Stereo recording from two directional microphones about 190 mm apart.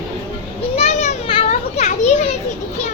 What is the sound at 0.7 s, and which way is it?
Children playing, 35° left (ahead or behind).